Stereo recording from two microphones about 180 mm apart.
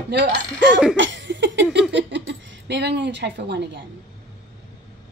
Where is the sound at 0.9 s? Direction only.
90° right.